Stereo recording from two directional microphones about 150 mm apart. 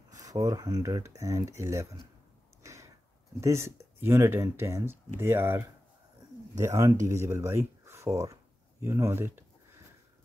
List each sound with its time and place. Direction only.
0.1 s speech: 25° right (ahead or behind)
2.6 s a sound: 20° right (ahead or behind)
3.3 s speech: 20° right (ahead or behind)